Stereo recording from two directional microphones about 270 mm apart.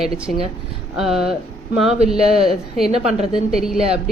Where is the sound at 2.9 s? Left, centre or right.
Right.